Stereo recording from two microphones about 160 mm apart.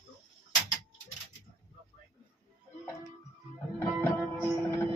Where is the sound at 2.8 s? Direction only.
20° left (ahead or behind).